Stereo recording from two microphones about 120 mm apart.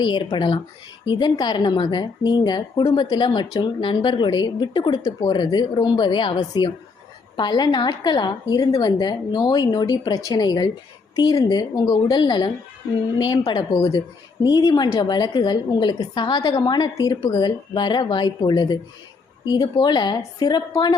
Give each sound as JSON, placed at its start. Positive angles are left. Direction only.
{"t": 0.0, "sound": "a woman's voice", "side_deg": 40}